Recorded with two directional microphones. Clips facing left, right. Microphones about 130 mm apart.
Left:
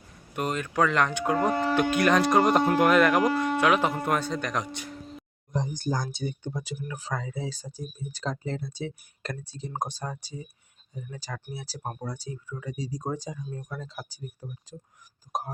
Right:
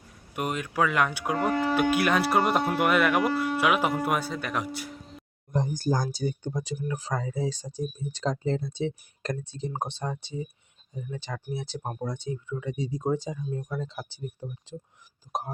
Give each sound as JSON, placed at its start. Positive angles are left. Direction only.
{"t": 0.3, "sound": "speech", "side_deg": -10}
{"t": 5.5, "sound": "speech", "side_deg": -50}
{"t": 6.2, "sound": "speech", "side_deg": -40}
{"t": 9.9, "sound": "speech", "side_deg": -25}
{"t": 11.8, "sound": "speech", "side_deg": -20}
{"t": 12.7, "sound": "speech", "side_deg": 35}
{"t": 13.1, "sound": "speech", "side_deg": -20}